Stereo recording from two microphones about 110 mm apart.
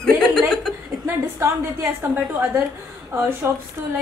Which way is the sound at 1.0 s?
30° right (ahead or behind).